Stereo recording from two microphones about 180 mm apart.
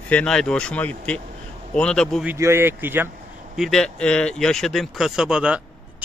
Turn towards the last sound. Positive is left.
turn(degrees=-5)  # may be behind; listen again after turning